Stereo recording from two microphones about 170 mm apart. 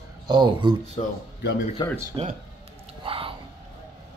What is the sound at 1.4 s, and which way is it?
Speech, 70° left (ahead or behind).